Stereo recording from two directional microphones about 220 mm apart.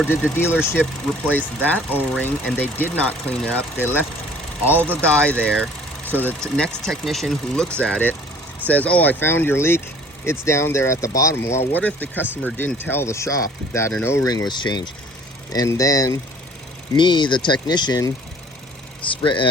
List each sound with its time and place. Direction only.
0.6 s speech: 10° left (ahead or behind)
19.1 s speech: 20° left (ahead or behind)